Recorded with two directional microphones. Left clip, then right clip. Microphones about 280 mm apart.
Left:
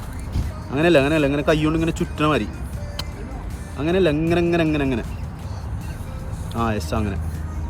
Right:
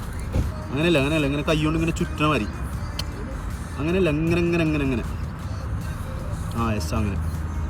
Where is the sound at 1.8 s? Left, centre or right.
Centre.